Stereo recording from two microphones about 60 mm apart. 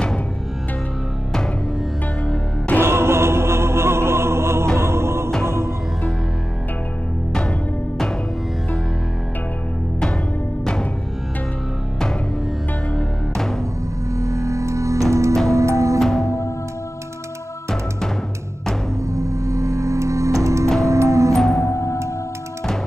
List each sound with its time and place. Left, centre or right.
2.8 s music: right
10.6 s music: centre
14.1 s music: right
16.0 s music: centre
19.1 s music: right
21.5 s music: left